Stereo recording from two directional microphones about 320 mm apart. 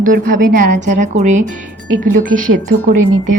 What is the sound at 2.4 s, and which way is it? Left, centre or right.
A woman's voice, right.